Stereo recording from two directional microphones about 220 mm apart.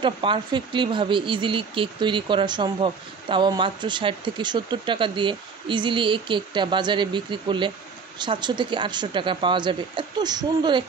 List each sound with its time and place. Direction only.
0.0 s speech: 20° right (ahead or behind)